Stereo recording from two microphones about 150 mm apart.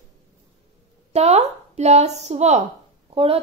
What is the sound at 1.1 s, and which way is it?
A woman's voice, 45° right (ahead or behind).